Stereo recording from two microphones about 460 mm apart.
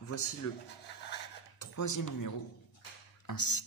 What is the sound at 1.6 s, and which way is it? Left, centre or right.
Speech, left.